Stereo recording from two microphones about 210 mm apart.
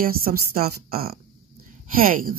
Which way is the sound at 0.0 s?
45° right (ahead or behind).